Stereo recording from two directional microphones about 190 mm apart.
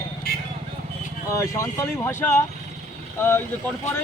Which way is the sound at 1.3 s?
15° left (ahead or behind).